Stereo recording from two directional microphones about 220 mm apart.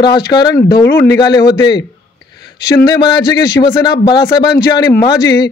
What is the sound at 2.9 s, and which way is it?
A man's voice, 20° left (ahead or behind).